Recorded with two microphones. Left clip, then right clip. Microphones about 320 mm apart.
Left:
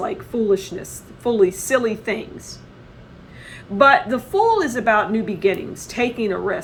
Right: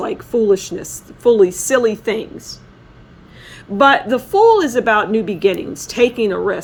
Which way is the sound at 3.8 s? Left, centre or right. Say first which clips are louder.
Right 2 dB; right.